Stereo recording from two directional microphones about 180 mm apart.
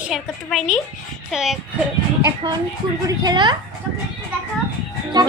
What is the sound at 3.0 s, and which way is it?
Speech, 25° right (ahead or behind).